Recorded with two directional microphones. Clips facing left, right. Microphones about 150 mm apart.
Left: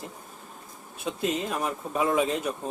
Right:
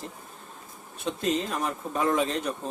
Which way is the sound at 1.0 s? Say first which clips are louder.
Right 1 dB; 5° left (ahead or behind).